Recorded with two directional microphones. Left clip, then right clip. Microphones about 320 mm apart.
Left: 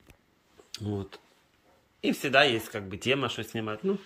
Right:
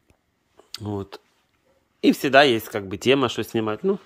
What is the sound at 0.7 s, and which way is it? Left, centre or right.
Speech, centre.